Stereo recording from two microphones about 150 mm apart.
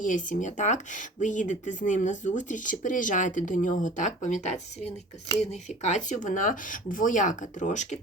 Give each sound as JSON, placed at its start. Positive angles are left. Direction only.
{"t": 0.0, "sound": "speech", "side_deg": 60}